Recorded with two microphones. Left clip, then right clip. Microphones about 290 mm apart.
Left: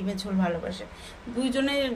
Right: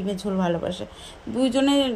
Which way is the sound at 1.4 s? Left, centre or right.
Right.